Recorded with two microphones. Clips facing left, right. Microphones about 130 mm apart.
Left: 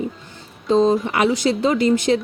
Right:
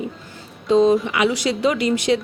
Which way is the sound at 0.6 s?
Centre (ahead or behind).